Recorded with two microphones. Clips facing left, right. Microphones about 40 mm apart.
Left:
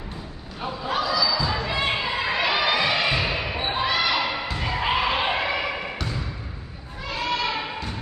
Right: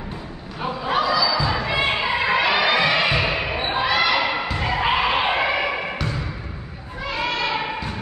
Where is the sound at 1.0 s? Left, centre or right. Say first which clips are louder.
Right 3 dB; right.